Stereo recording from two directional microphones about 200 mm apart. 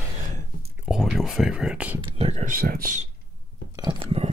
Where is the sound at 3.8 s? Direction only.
25° right (ahead or behind).